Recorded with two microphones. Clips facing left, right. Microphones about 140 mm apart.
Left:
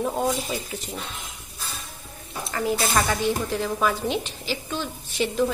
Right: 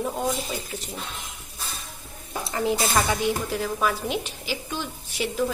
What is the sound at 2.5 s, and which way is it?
A woman's voice, 20° right (ahead or behind).